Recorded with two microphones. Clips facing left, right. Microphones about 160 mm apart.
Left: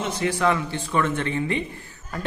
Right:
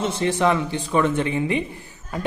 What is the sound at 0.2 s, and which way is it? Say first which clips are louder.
A man's voice: right 2 dB; 20° right (ahead or behind).